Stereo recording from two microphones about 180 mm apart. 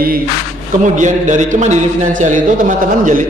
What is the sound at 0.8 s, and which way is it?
A man's voice, 45° right (ahead or behind).